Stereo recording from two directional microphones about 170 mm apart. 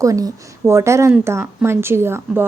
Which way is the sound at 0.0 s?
20° right (ahead or behind).